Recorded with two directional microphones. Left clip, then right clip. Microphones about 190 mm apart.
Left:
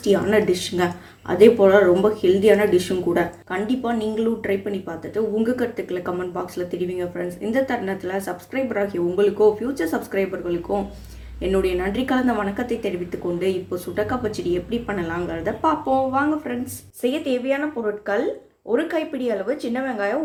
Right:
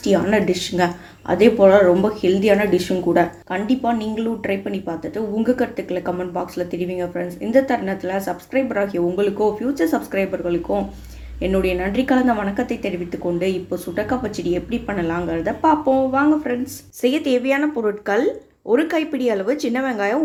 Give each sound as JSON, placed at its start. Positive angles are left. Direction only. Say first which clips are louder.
{"t": 0.0, "sound": "speech", "louder": "right 1 dB", "side_deg": -15}
{"t": 11.4, "sound": "speech", "louder": "right 1 dB", "side_deg": -10}
{"t": 17.0, "sound": "speech", "louder": "right 4 dB", "side_deg": -25}